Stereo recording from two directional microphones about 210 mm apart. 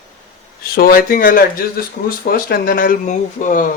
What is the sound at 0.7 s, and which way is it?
Speech, 45° left (ahead or behind).